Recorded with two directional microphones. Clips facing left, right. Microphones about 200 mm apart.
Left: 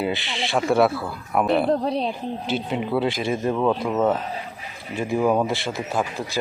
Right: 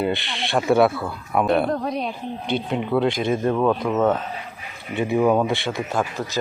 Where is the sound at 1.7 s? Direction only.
30° left (ahead or behind).